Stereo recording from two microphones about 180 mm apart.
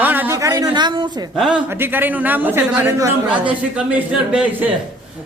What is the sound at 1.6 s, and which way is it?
A woman's voice, 10° right (ahead or behind).